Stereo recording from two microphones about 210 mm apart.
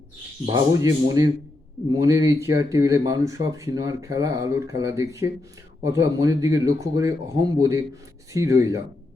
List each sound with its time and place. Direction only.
0.4 s speech: 15° right (ahead or behind)